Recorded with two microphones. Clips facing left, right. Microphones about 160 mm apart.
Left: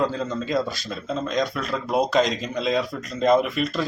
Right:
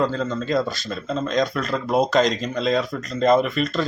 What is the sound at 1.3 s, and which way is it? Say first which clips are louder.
Speech: right 3 dB; 5° left (ahead or behind).